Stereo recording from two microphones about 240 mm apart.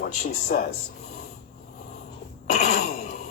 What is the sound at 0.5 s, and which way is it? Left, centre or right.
Speech, left.